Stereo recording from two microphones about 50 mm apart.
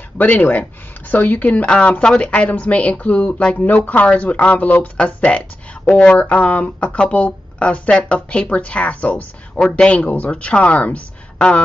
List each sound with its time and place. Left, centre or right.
0.2 s speech: left
10.0 s speech: left
10.3 s speech: left